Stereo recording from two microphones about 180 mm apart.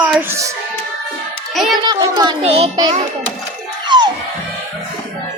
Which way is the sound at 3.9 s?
25° right (ahead or behind).